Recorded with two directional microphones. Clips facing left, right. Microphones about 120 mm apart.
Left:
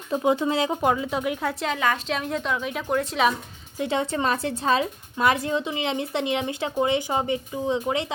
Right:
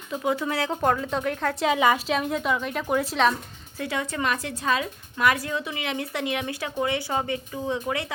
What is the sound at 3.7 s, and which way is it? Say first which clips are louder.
A woman's voice: left 4 dB; 25° left (ahead or behind).